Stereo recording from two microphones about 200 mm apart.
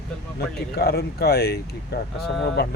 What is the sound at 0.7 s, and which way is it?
Speech, 50° left (ahead or behind).